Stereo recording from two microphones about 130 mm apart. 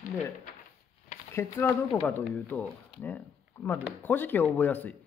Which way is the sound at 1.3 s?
20° left (ahead or behind).